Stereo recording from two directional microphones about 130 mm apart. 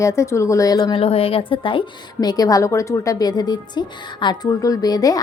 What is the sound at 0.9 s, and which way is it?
A woman's voice, 45° left (ahead or behind).